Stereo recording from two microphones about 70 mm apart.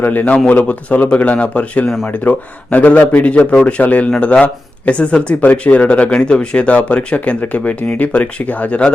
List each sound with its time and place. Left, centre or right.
0.0 s speech: left